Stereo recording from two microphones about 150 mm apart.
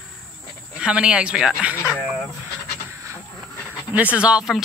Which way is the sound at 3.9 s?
10° right (ahead or behind).